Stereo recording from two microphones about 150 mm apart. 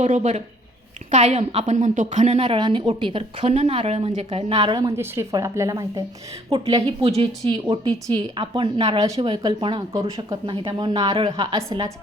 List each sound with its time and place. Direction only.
0.0 s a woman's voice: 50° right (ahead or behind)
2.6 s a woman's voice: 30° right (ahead or behind)
4.8 s speech: 20° right (ahead or behind)
7.2 s a woman's voice: 35° right (ahead or behind)
9.0 s speech: 20° right (ahead or behind)
9.2 s a woman's voice: 35° right (ahead or behind)